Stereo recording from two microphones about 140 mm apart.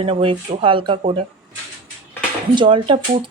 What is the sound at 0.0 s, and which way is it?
Speech, 40° right (ahead or behind).